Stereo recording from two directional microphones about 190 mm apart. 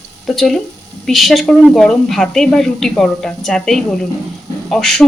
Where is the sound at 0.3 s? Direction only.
Centre (ahead or behind).